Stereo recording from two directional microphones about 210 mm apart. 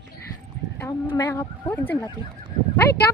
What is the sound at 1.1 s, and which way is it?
Speech, 15° left (ahead or behind).